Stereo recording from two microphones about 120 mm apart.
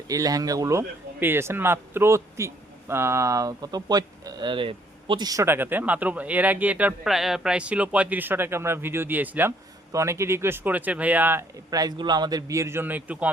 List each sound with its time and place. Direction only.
0.1 s speech: 30° right (ahead or behind); by 9.5 s 15° right (ahead or behind)
9.9 s speech: 25° right (ahead or behind)
11.7 s speech: 30° right (ahead or behind); by 13.3 s 10° right (ahead or behind)